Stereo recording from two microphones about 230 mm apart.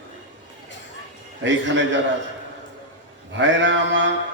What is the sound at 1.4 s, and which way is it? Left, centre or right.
Mantra, right.